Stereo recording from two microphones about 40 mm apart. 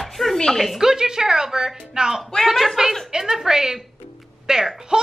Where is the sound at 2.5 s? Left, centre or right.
Centre.